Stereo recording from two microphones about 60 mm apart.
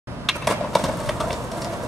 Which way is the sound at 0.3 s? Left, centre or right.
Centre.